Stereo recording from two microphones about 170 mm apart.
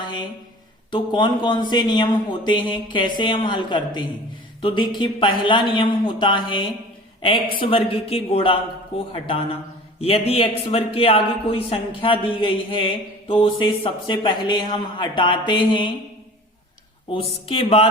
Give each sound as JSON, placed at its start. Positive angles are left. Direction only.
{"t": 0.0, "sound": "a sound", "side_deg": 25}
{"t": 0.9, "sound": "mantra", "side_deg": 30}
{"t": 7.6, "sound": "speech", "side_deg": 35}
{"t": 11.9, "sound": "mantra", "side_deg": 30}
{"t": 17.1, "sound": "speech", "side_deg": 35}